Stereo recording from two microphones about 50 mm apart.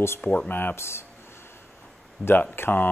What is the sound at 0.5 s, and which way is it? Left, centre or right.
Speech, left.